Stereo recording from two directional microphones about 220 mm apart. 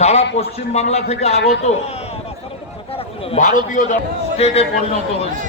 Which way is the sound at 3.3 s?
35° left (ahead or behind).